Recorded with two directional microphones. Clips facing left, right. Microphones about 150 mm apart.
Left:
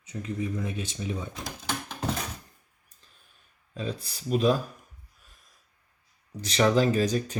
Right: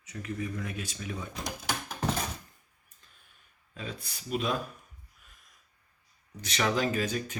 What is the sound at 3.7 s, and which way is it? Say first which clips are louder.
Speech: left 7 dB; 35° left (ahead or behind).